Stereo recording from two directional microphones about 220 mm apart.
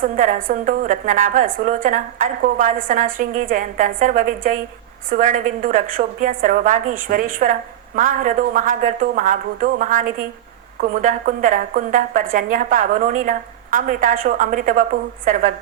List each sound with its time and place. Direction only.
0.0 s a woman's voice: 40° right (ahead or behind)